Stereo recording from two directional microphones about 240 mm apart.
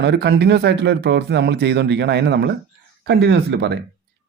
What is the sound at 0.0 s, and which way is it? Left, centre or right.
Speech, right.